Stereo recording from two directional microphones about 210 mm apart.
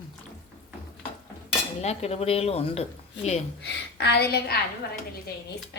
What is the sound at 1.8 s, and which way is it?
Speech, 30° left (ahead or behind).